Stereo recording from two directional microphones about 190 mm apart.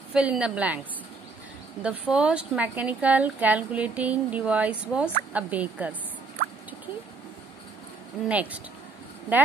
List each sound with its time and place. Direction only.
0.1 s a woman's voice: 5° right (ahead or behind)
1.8 s a woman's voice: 5° right (ahead or behind)
8.3 s a woman's voice: 10° right (ahead or behind)